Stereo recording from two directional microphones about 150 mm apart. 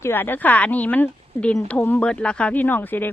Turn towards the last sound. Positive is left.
turn(degrees=10)  # may be behind; listen again after turning